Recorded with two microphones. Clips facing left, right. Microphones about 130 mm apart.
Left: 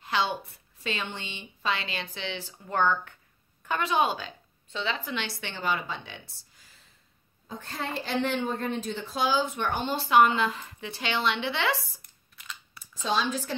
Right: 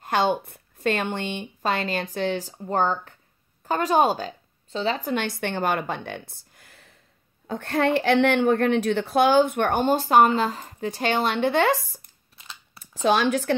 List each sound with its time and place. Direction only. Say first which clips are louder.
0.0 s a woman's voice: right 6 dB; 50° right (ahead or behind)
12.4 s scissors: even; 25° right (ahead or behind)
12.8 s speech: right 7 dB; 70° right (ahead or behind)